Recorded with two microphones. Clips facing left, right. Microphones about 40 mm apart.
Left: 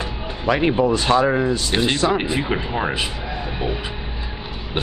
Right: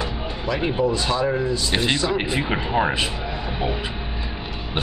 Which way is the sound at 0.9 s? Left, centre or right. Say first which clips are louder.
Left 5 dB; left.